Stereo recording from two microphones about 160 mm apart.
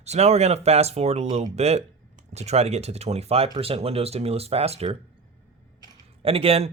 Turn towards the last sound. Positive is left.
turn(degrees=-40)  # may be behind; listen again after turning